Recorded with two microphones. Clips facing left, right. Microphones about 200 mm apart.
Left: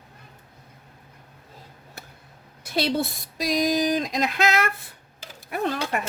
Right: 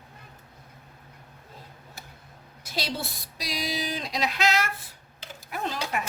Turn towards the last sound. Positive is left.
turn(degrees=55)  # may be behind; listen again after turning